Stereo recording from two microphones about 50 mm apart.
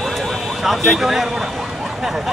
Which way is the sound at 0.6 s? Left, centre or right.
Centre.